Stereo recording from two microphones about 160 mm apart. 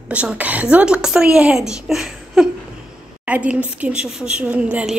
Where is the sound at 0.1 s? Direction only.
10° right (ahead or behind).